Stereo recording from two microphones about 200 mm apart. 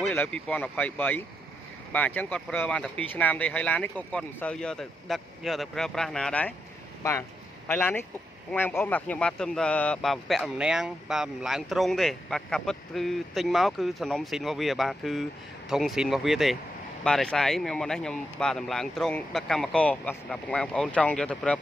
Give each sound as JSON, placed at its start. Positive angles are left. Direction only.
{"t": 0.0, "sound": "speech", "side_deg": 10}